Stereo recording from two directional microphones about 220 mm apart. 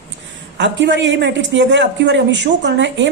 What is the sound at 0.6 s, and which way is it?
Speech, 55° right (ahead or behind).